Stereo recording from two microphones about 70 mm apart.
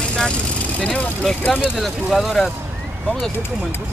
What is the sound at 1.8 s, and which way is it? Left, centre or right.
Speech, centre.